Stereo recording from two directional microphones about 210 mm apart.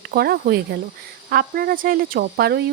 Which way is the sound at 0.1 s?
45° right (ahead or behind).